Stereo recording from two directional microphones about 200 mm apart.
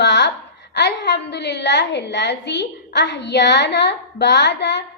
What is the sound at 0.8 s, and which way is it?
A woman's voice, 60° left (ahead or behind).